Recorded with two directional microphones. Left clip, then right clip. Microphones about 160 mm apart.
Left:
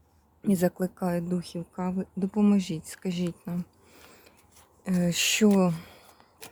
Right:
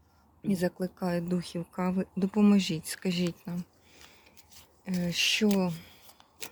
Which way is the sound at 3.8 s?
30° left (ahead or behind).